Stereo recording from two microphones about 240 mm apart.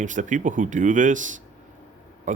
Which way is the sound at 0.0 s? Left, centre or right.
Right.